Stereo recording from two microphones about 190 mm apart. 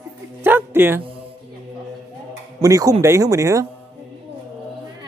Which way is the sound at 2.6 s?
15° right (ahead or behind).